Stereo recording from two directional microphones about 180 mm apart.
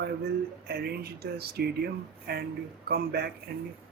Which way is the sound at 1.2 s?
60° right (ahead or behind).